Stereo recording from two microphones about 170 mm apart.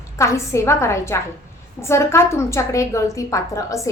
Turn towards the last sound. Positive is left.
turn(degrees=20)  # may be behind; listen again after turning